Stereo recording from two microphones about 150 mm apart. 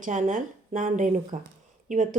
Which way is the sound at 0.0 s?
55° right (ahead or behind).